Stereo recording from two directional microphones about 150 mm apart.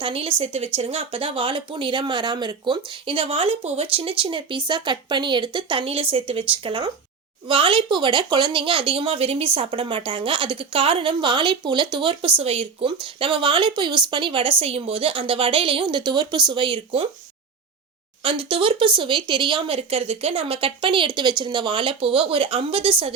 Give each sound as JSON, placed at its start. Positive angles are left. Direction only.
{"t": 0.0, "sound": "speech", "side_deg": -35}
{"t": 18.2, "sound": "speech", "side_deg": -40}